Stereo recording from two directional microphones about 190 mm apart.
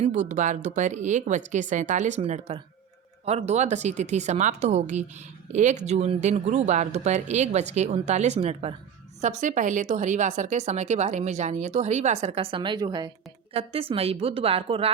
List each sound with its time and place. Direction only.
0.0 s a woman's voice: 40° right (ahead or behind)